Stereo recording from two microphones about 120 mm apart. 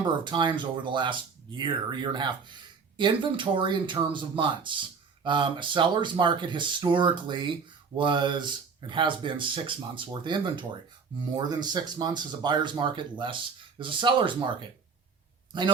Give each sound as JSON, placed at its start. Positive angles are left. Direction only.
{"t": 0.0, "sound": "speech", "side_deg": -40}